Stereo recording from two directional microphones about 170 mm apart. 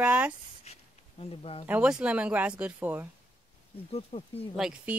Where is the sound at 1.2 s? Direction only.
35° left (ahead or behind).